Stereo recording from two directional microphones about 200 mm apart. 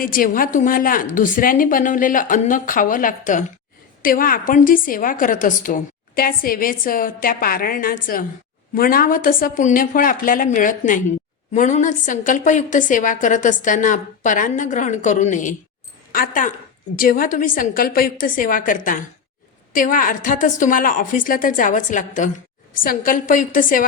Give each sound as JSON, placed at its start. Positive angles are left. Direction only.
{"t": 0.0, "sound": "a woman's voice", "side_deg": 45}